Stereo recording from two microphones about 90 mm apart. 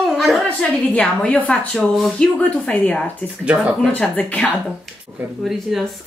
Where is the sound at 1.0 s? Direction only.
15° left (ahead or behind).